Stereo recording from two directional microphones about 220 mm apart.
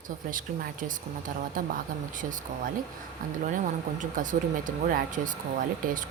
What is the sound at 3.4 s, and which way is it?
Speech, 35° right (ahead or behind).